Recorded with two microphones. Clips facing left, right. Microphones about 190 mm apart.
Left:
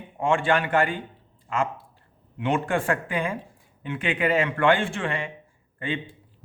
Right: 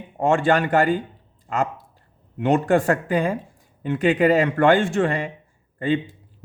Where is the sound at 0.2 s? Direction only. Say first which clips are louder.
Right 4 dB; 40° right (ahead or behind).